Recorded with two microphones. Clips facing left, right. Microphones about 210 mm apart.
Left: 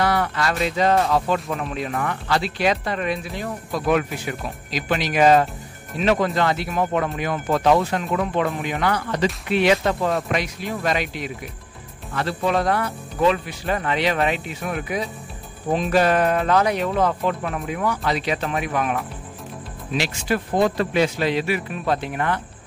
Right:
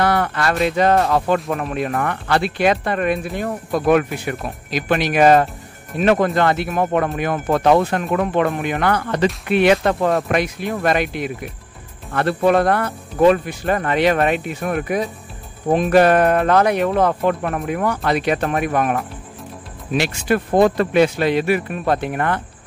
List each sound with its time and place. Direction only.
0.0 s speech: 55° right (ahead or behind)